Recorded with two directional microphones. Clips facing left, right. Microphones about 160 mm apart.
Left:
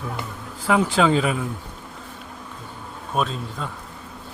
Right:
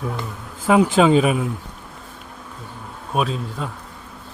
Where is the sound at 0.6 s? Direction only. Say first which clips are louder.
Right 4 dB; 15° right (ahead or behind).